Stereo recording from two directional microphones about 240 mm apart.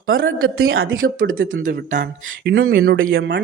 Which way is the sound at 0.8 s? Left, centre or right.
Right.